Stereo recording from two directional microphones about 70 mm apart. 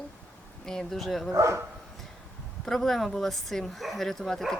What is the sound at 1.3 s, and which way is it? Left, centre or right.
Speech, right.